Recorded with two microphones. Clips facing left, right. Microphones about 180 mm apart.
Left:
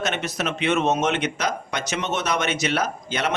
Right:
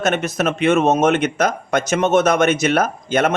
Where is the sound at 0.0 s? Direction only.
50° right (ahead or behind).